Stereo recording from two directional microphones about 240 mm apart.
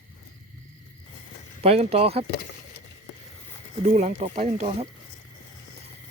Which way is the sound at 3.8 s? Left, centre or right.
Right.